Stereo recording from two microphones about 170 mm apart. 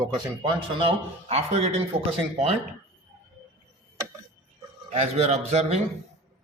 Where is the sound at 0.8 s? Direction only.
35° right (ahead or behind).